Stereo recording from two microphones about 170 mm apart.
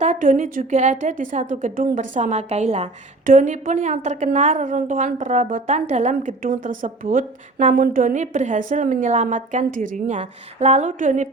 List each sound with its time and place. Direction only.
0.0 s a woman's voice: 45° right (ahead or behind)